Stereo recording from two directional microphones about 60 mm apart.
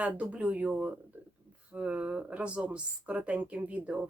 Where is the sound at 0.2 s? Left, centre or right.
Right.